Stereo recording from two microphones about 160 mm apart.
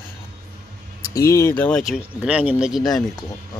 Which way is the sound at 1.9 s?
10° right (ahead or behind).